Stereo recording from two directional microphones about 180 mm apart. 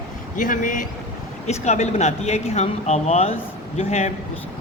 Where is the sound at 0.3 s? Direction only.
45° left (ahead or behind).